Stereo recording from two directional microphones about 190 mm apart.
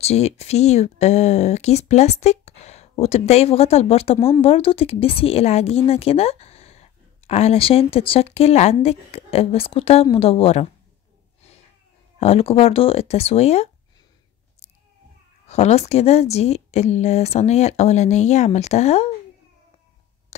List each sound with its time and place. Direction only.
0.0 s speech: 35° left (ahead or behind)
12.2 s speech: 30° left (ahead or behind)
15.4 s speech: 35° left (ahead or behind)